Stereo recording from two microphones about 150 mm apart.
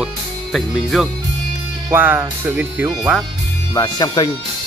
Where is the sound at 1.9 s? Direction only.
15° right (ahead or behind).